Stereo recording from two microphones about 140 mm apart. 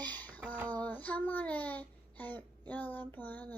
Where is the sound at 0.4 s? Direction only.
10° right (ahead or behind).